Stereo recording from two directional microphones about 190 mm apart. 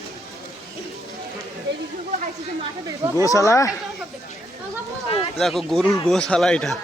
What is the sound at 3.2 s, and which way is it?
Speech, 15° left (ahead or behind).